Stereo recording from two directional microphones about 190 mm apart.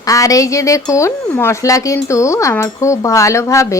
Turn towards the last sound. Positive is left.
turn(degrees=15)  # may be behind; listen again after turning